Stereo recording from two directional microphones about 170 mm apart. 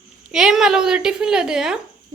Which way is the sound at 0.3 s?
5° right (ahead or behind).